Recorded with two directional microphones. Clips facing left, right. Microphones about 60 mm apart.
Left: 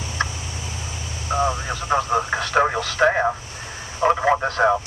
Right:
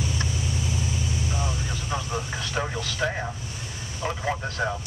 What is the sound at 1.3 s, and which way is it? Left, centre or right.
Speech, left.